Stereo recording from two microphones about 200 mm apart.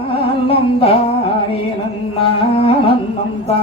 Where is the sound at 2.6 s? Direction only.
25° left (ahead or behind).